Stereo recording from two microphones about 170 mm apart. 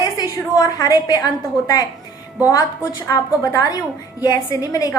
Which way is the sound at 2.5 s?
20° left (ahead or behind).